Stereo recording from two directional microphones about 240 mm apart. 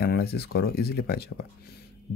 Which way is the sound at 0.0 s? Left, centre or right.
Left.